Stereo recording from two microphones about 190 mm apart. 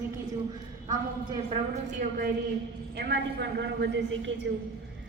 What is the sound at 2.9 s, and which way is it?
A woman's voice, 60° right (ahead or behind).